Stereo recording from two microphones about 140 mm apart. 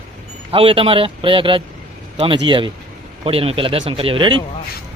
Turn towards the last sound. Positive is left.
turn(degrees=-35)  # may be behind; listen again after turning